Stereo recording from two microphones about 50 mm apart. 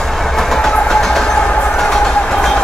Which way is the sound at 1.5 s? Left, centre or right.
Left.